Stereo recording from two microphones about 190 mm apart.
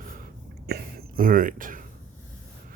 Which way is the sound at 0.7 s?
55° right (ahead or behind).